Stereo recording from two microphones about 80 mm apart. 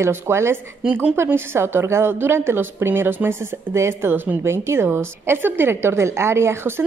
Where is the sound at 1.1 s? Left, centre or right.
Right.